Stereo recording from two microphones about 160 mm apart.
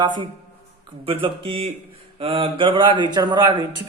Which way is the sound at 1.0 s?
35° right (ahead or behind).